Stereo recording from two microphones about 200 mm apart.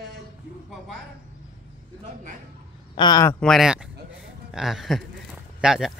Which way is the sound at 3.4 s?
Centre (ahead or behind).